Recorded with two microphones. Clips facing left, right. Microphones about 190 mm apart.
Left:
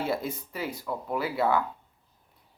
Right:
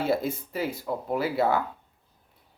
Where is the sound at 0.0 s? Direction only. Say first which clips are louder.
Right 4 dB; 25° right (ahead or behind).